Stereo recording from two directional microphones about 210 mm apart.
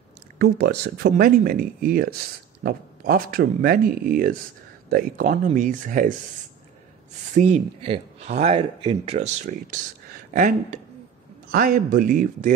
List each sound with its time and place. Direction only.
0.4 s speech: 45° right (ahead or behind)
7.3 s speech: 35° right (ahead or behind)
11.5 s speech: 45° right (ahead or behind)